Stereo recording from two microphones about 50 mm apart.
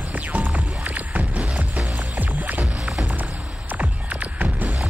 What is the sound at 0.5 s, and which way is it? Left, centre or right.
Music, right.